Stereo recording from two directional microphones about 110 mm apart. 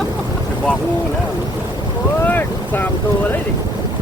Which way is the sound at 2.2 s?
15° left (ahead or behind).